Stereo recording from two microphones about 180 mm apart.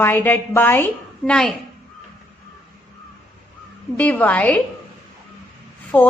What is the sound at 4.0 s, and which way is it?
Speech, 10° left (ahead or behind).